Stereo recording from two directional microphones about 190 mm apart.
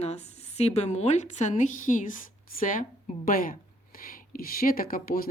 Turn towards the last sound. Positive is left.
turn(degrees=50)  # may be behind; listen again after turning